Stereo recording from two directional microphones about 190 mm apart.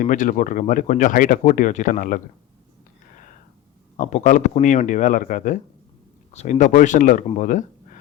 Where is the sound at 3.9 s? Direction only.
40° left (ahead or behind).